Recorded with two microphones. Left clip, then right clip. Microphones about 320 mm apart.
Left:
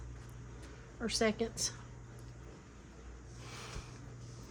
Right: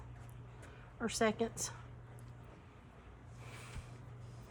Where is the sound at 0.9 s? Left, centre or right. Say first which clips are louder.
Left 1 dB; centre.